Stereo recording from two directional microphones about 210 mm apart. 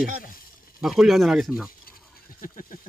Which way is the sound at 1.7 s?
45° left (ahead or behind).